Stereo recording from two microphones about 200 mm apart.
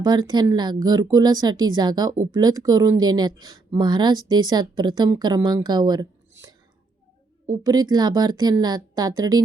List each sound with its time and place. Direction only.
0.0 s speech: 20° right (ahead or behind)
7.4 s speech: 20° right (ahead or behind)